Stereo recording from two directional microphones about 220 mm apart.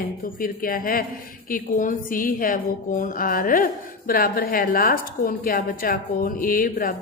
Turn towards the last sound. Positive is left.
turn(degrees=40)  # may be behind; listen again after turning